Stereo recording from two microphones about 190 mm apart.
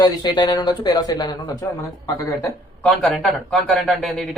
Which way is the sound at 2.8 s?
Centre (ahead or behind).